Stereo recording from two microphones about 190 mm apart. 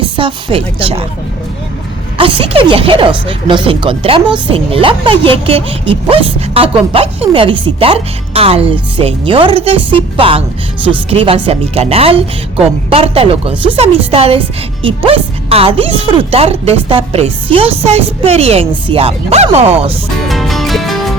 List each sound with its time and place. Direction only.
0.2 s speech: 25° right (ahead or behind)
2.1 s a woman's voice: 30° right (ahead or behind)
20.2 s music: centre (ahead or behind)